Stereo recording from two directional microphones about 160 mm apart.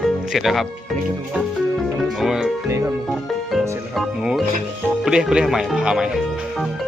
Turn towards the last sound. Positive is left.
turn(degrees=0)  # may be behind; listen again after turning